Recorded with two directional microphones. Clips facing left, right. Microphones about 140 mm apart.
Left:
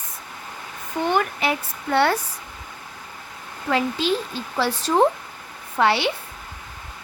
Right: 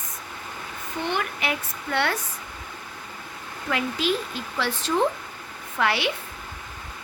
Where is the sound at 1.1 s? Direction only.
35° left (ahead or behind).